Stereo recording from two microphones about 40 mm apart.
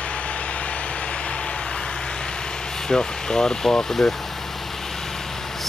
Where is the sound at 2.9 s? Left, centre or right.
Centre.